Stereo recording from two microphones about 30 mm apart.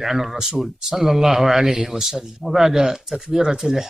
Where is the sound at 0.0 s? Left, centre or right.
Centre.